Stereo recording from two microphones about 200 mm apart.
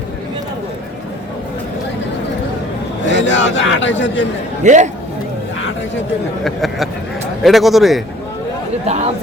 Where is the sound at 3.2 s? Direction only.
65° left (ahead or behind).